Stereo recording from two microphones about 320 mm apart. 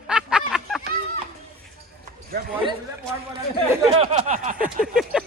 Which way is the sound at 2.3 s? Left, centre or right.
Right.